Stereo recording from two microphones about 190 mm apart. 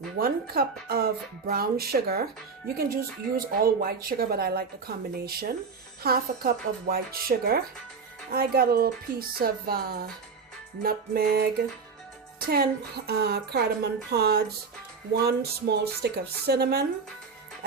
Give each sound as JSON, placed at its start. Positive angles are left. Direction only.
{"t": 0.2, "sound": "speech", "side_deg": -50}
{"t": 13.1, "sound": "speech", "side_deg": -60}